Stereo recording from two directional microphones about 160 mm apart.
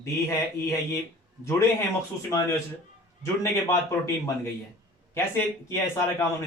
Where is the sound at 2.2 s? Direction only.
20° left (ahead or behind).